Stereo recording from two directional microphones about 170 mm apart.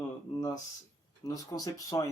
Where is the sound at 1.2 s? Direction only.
20° left (ahead or behind).